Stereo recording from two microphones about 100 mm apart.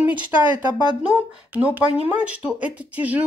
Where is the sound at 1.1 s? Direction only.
15° right (ahead or behind).